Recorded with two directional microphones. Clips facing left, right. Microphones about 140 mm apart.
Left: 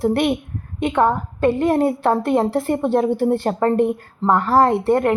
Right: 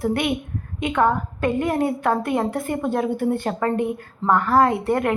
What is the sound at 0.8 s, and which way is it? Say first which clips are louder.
A woman's voice: left 2 dB; 30° left (ahead or behind).